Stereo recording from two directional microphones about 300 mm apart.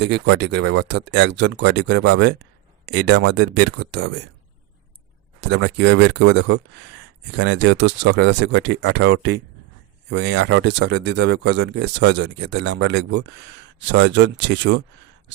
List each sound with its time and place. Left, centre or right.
0.0 s speech: right
5.4 s speech: right